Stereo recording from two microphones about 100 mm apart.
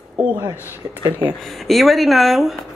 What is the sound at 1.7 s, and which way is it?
Speech, centre (ahead or behind).